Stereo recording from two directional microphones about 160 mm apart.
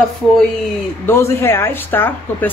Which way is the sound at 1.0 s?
15° left (ahead or behind).